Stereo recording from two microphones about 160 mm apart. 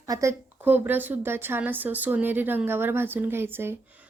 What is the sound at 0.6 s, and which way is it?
Speech, 10° right (ahead or behind).